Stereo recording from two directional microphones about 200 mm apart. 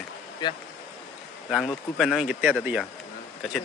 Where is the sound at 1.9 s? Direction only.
Centre (ahead or behind).